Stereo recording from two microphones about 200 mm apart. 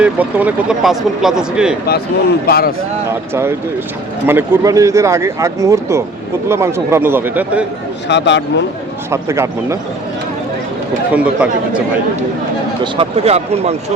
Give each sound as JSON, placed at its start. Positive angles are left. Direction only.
{"t": 0.0, "sound": "speech", "side_deg": -10}
{"t": 2.5, "sound": "speech", "side_deg": 50}
{"t": 3.1, "sound": "speech", "side_deg": -10}
{"t": 8.0, "sound": "speech", "side_deg": 60}
{"t": 9.0, "sound": "speech", "side_deg": -15}
{"t": 11.1, "sound": "speech", "side_deg": -5}
{"t": 12.8, "sound": "speech", "side_deg": -30}